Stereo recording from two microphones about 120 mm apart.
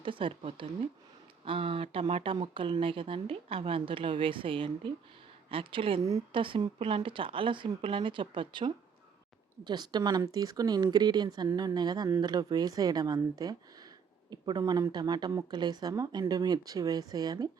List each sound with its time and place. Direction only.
0.0 s speech: 45° right (ahead or behind)